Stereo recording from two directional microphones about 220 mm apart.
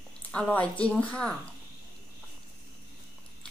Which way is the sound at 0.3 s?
5° left (ahead or behind).